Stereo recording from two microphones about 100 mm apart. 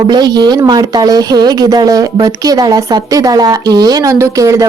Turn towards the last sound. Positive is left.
turn(degrees=-35)  # may be behind; listen again after turning